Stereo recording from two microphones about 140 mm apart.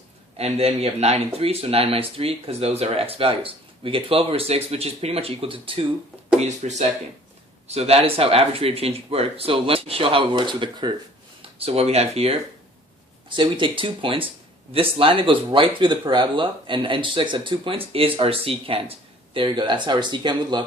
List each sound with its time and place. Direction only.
0.3 s speech: 50° right (ahead or behind)
6.4 s speech: 55° right (ahead or behind); by 10.9 s 35° right (ahead or behind)
11.5 s speech: 45° right (ahead or behind)
13.2 s speech: 35° right (ahead or behind)